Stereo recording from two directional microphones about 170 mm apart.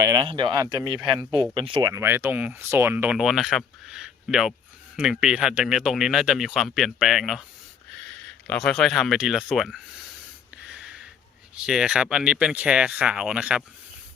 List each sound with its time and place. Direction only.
0.0 s speech: 25° right (ahead or behind)
1.9 s speech: 15° right (ahead or behind)
10.7 s a sound: 5° right (ahead or behind)
11.5 s speech: 5° right (ahead or behind)